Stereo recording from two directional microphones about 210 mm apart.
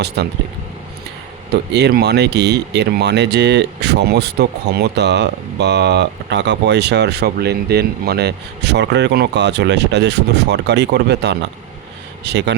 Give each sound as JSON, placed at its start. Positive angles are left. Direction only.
{"t": 0.2, "sound": "speech", "side_deg": -55}
{"t": 1.7, "sound": "speech", "side_deg": -50}